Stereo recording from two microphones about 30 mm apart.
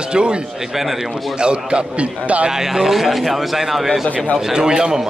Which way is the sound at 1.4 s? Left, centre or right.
Right.